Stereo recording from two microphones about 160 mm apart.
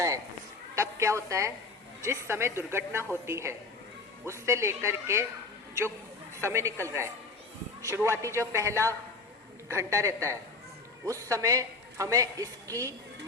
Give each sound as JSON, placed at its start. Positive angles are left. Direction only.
{"t": 0.8, "sound": "a woman's voice", "side_deg": -20}
{"t": 6.4, "sound": "a woman's voice", "side_deg": -15}